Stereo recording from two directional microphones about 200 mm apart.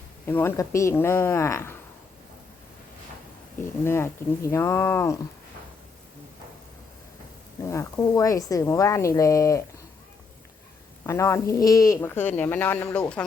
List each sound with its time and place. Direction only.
0.3 s speech: 10° left (ahead or behind)
3.8 s speech: 10° left (ahead or behind)
7.7 s speech: 15° left (ahead or behind)
11.0 s speech: 15° left (ahead or behind)